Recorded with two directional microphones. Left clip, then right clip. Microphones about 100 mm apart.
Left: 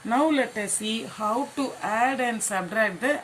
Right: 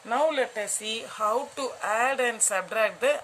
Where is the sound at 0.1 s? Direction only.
70° right (ahead or behind); by 2.7 s 90° right.